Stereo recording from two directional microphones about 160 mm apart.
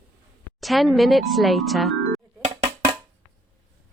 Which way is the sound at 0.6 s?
Centre (ahead or behind).